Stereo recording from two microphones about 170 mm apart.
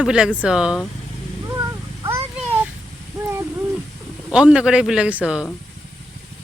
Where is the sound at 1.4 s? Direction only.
15° right (ahead or behind).